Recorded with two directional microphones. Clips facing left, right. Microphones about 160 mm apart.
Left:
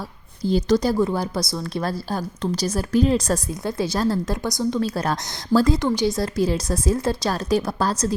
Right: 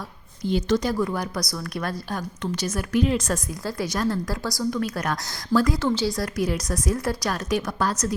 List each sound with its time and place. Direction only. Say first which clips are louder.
0.4 s a woman's voice: left 3 dB; 35° left (ahead or behind)
3.6 s a woman's voice: left 2 dB; 25° left (ahead or behind)
5.8 s a woman's voice: left 3 dB; 15° left (ahead or behind); by 8.1 s 30° left (ahead or behind)